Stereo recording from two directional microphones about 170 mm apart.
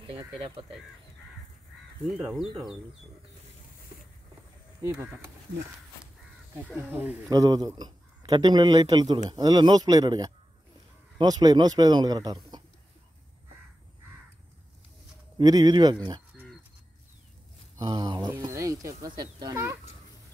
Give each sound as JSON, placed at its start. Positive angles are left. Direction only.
{"t": 2.1, "sound": "speech", "side_deg": -5}
{"t": 4.8, "sound": "speech", "side_deg": -15}
{"t": 6.7, "sound": "speech", "side_deg": -10}
{"t": 7.2, "sound": "a man's voice", "side_deg": -20}
{"t": 15.3, "sound": "a man's voice", "side_deg": -25}
{"t": 17.7, "sound": "a man's voice", "side_deg": -25}